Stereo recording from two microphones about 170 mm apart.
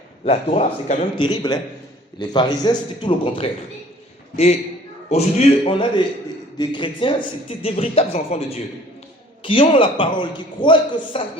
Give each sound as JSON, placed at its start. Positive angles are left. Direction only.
{"t": 0.3, "sound": "a man's voice", "side_deg": 35}
{"t": 5.0, "sound": "speech", "side_deg": 40}